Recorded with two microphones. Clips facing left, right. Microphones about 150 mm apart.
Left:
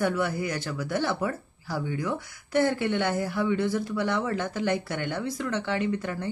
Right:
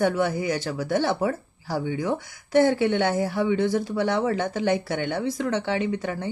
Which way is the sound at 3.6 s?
25° right (ahead or behind).